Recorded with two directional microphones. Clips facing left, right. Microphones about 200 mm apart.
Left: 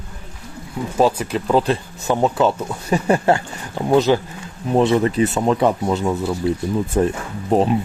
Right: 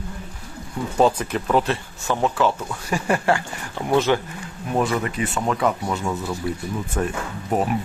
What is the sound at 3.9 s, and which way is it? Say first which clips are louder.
Speech: left 4 dB; 35° left (ahead or behind).